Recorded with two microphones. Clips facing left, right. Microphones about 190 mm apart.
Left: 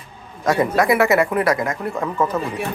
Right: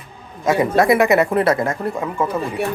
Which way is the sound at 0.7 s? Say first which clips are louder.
Right 3 dB; 25° right (ahead or behind).